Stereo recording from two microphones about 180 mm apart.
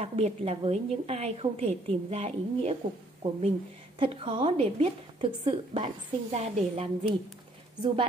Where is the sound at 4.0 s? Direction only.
30° right (ahead or behind).